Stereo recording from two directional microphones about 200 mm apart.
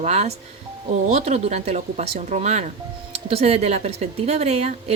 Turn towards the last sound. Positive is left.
turn(degrees=-30)  # may be behind; listen again after turning